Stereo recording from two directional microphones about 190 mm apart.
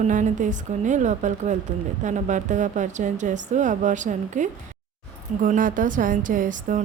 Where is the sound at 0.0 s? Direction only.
40° right (ahead or behind).